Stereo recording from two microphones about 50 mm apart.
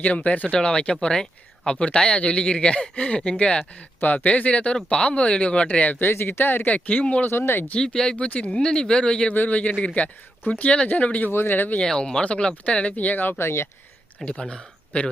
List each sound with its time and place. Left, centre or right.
0.0 s speech: left
4.0 s speech: left
6.0 s speech: left
6.7 s speech: left
7.3 s speech: left
7.8 s speech: centre
9.3 s speech: left
11.3 s speech: left
11.8 s speech: centre; by 13.3 s left
13.4 s speech: left
14.3 s speech: centre